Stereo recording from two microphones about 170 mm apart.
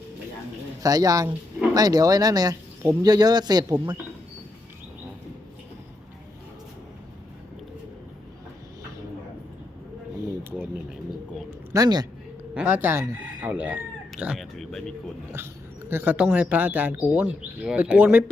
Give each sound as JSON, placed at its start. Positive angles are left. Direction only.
{"t": 0.8, "sound": "speech", "side_deg": -20}
{"t": 11.7, "sound": "speech", "side_deg": -20}
{"t": 12.5, "sound": "speech", "side_deg": -10}
{"t": 15.9, "sound": "speech", "side_deg": -10}